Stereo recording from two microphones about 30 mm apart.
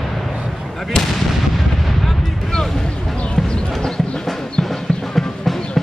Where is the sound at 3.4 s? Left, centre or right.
Left.